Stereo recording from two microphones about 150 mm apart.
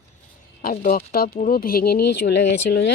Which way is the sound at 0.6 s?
75° left (ahead or behind).